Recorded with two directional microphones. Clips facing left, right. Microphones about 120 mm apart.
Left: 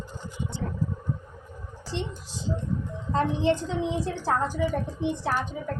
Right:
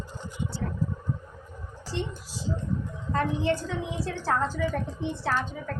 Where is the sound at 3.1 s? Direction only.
20° left (ahead or behind).